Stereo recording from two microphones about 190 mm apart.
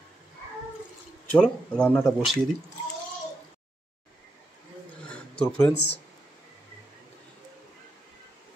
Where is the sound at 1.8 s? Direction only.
5° left (ahead or behind).